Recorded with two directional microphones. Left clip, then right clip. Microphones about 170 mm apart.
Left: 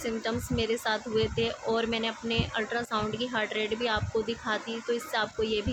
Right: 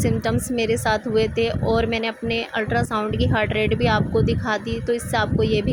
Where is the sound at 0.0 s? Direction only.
40° right (ahead or behind).